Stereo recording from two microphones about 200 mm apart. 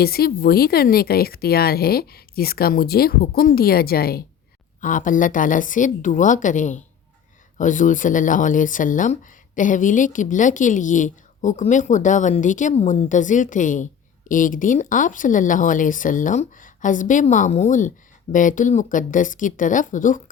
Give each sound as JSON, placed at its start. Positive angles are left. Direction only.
{"t": 0.0, "sound": "speech", "side_deg": 50}